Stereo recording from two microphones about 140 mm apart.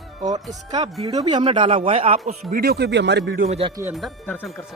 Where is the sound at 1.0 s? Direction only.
30° right (ahead or behind); by 2.4 s 50° right (ahead or behind).